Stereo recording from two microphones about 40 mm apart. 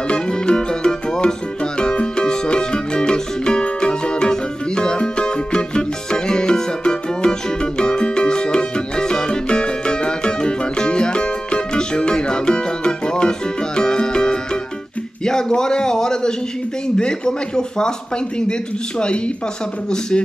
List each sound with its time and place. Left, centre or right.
0.1 s music: left
15.2 s a sound: centre
16.8 s speech: left